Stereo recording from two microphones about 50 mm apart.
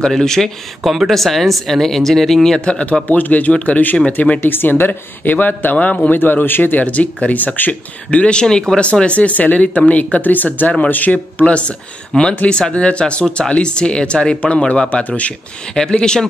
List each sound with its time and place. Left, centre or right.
0.0 s speech: centre
0.8 s speech: centre
2.6 s speech: left
4.4 s speech: left
6.1 s speech: left
8.1 s speech: left
9.2 s speech: left
15.7 s speech: centre